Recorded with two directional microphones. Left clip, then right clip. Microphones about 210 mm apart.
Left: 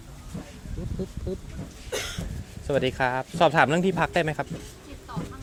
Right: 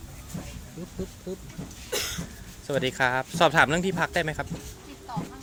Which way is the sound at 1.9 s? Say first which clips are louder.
Right 1 dB; 30° right (ahead or behind).